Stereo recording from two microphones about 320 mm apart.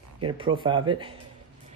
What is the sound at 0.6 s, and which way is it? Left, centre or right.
Speech, centre.